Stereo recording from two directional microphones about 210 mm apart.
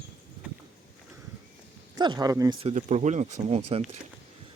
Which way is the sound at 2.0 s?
20° right (ahead or behind).